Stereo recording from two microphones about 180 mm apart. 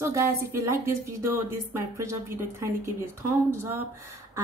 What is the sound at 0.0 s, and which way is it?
A woman's voice, 15° right (ahead or behind).